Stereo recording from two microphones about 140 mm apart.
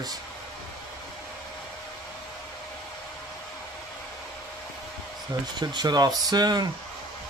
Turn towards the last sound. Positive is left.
turn(degrees=-30)  # may be behind; listen again after turning